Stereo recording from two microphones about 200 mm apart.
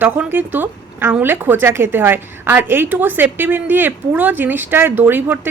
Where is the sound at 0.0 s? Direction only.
10° right (ahead or behind).